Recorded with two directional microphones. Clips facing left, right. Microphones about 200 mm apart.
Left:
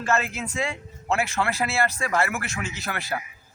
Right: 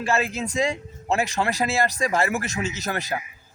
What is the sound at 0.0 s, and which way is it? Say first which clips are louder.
Speech: right 2 dB; 15° right (ahead or behind).